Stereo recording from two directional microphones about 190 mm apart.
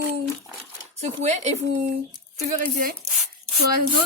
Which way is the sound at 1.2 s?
35° right (ahead or behind).